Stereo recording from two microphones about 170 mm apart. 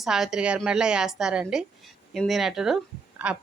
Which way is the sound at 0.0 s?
5° right (ahead or behind).